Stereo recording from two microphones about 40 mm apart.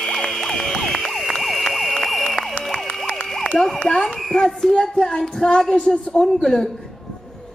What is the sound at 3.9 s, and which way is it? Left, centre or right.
A child's voice, centre.